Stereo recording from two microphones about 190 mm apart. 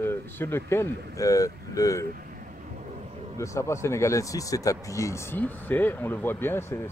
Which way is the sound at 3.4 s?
15° left (ahead or behind).